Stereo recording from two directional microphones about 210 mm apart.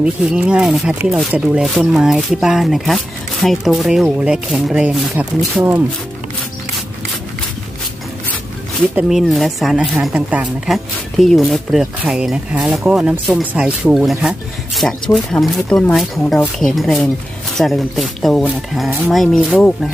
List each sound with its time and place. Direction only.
0.0 s speech: 5° right (ahead or behind)
8.9 s speech: centre (ahead or behind)